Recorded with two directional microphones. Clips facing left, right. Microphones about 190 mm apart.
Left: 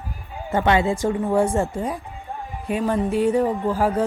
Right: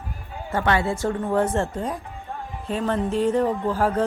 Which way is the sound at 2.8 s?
5° left (ahead or behind).